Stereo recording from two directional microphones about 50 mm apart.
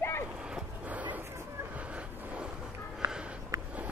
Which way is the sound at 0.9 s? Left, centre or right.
Right.